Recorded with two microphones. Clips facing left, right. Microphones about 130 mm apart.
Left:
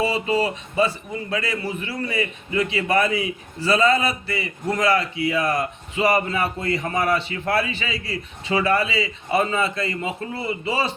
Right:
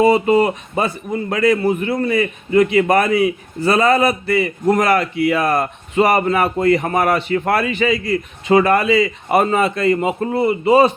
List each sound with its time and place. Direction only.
0.0 s a man's voice: 50° right (ahead or behind)
7.9 s a man's voice: 30° left (ahead or behind)
8.4 s a man's voice: 50° right (ahead or behind)